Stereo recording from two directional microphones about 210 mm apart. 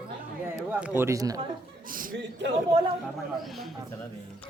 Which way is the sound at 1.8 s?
40° right (ahead or behind).